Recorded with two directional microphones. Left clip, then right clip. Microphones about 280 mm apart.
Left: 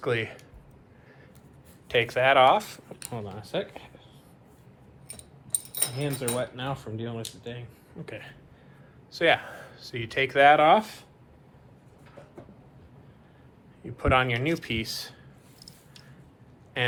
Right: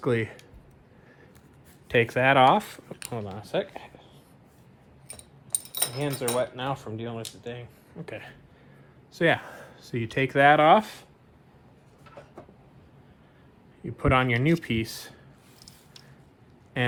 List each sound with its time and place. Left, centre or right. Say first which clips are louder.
0.0 s speech: right 1 dB; right
1.9 s speech: even; right
6.0 s speech: right 3 dB; right
13.8 s speech: even; right